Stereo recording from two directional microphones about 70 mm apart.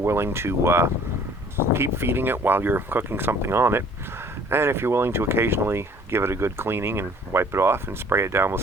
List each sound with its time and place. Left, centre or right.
0.0 s speech: right